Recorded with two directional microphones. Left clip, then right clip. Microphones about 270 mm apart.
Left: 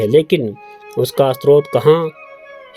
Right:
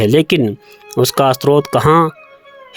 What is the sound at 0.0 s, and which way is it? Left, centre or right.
Speech, right.